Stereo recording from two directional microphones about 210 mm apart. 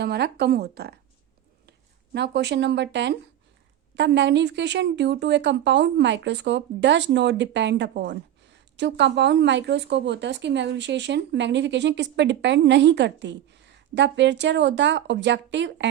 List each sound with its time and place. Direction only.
0.0 s speech: 50° right (ahead or behind)
2.1 s speech: 55° right (ahead or behind)